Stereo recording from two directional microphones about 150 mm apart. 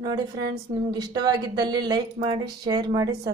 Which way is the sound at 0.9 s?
25° right (ahead or behind).